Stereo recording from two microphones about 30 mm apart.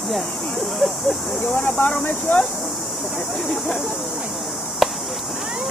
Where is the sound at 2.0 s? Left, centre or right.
Left.